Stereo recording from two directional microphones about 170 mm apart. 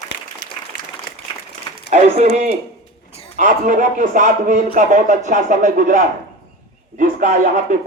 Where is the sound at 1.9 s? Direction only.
40° right (ahead or behind).